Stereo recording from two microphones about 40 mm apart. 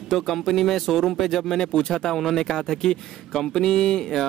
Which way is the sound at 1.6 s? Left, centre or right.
Centre.